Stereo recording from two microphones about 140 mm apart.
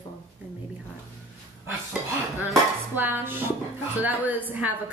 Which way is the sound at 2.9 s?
15° right (ahead or behind).